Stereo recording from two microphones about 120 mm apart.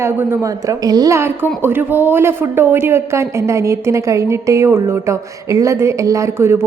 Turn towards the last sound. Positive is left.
turn(degrees=-20)  # may be behind; listen again after turning